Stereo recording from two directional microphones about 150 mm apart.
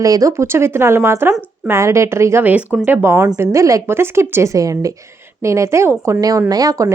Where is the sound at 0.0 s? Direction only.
20° right (ahead or behind).